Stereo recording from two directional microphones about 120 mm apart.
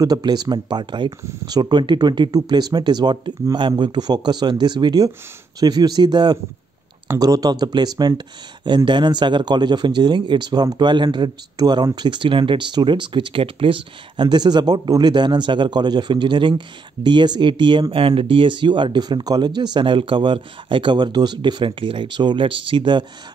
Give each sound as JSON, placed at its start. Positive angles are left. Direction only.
{"t": 0.0, "sound": "speech", "side_deg": -35}